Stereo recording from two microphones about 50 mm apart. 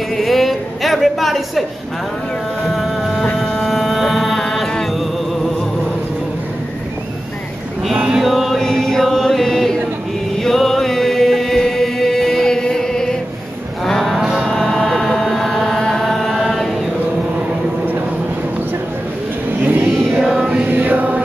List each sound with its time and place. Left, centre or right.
0.2 s a sound: centre
2.6 s a sound: centre
3.3 s music: centre
7.9 s male singing: centre
8.5 s chant: centre
13.8 s cattle: centre
14.2 s music: centre
16.1 s chant: centre
19.6 s vehicle: right
20.6 s mantra: right